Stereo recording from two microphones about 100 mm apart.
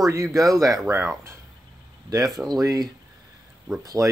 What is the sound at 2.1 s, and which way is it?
Speech, 40° right (ahead or behind).